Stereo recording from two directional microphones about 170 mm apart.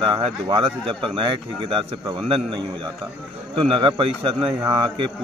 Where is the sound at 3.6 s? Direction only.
30° right (ahead or behind).